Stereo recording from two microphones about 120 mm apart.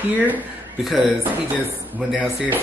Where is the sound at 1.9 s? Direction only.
10° right (ahead or behind).